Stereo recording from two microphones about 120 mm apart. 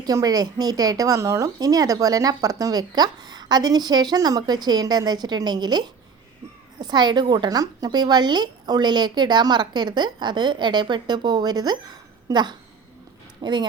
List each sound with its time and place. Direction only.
0.0 s speech: 30° right (ahead or behind)